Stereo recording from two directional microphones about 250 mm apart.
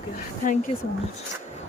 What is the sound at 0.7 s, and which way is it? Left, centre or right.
Speech, left.